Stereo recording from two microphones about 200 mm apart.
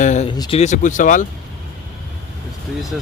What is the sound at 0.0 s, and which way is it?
Speech, 35° left (ahead or behind).